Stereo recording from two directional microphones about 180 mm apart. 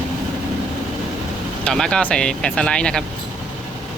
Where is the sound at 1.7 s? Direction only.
5° left (ahead or behind).